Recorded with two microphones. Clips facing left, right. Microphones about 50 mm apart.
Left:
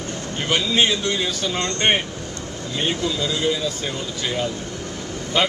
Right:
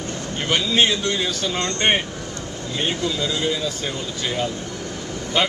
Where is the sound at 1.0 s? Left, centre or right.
Centre.